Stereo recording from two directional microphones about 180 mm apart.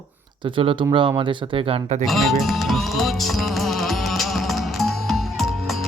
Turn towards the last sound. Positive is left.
turn(degrees=0)  # may be behind; listen again after turning